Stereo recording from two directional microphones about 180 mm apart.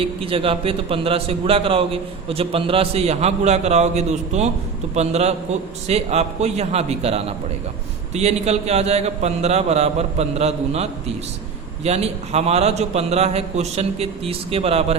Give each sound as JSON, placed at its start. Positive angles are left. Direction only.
{"t": 0.0, "sound": "a man's voice", "side_deg": -30}